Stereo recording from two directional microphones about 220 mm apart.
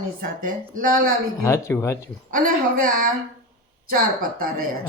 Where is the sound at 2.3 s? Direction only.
40° right (ahead or behind).